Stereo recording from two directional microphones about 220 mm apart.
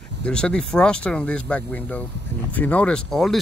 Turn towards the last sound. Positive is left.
turn(degrees=0)  # may be behind; listen again after turning